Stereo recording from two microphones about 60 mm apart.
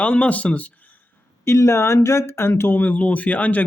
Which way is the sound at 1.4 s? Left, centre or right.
Left.